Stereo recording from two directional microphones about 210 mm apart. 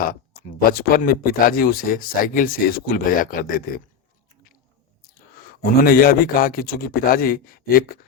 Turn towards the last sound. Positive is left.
turn(degrees=45)  # may be behind; listen again after turning